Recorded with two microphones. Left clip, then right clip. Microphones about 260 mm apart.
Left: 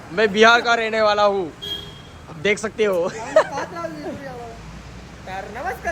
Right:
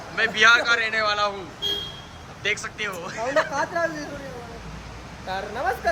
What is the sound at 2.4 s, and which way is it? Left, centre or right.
Speech, centre.